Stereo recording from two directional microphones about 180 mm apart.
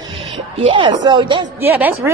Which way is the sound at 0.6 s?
30° right (ahead or behind).